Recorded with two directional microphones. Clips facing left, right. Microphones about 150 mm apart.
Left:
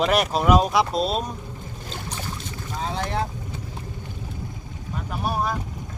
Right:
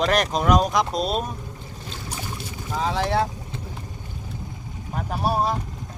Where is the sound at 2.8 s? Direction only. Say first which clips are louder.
Right 5 dB; 90° right.